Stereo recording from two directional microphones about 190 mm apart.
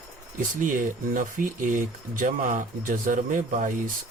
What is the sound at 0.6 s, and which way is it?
Speech, 45° right (ahead or behind).